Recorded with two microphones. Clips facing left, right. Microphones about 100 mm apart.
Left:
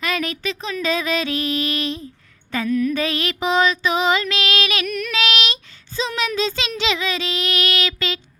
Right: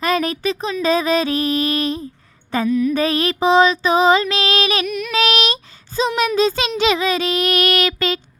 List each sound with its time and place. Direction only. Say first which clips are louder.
0.0 s female singing: right 5 dB; 35° right (ahead or behind)
2.6 s music: right 2 dB; 10° right (ahead or behind)
2.9 s female singing: right 5 dB; 40° right (ahead or behind)
6.1 s child singing: right 6 dB; 45° right (ahead or behind)